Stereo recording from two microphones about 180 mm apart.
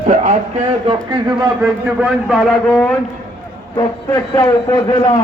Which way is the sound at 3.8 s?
20° left (ahead or behind).